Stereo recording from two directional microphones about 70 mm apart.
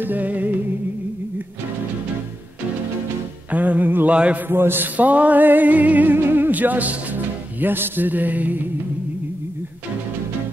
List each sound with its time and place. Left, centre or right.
0.0 s music: right
3.5 s a sound: right
4.5 s music: right